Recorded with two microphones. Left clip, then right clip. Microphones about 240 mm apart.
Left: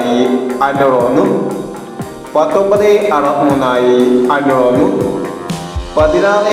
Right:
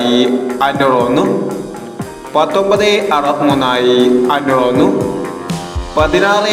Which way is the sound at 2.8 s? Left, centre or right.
Right.